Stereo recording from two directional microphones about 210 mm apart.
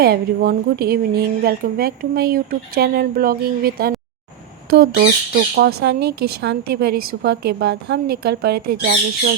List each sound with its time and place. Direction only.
0.0 s speech: 45° right (ahead or behind)